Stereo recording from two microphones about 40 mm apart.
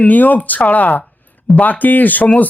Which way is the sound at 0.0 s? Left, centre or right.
Left.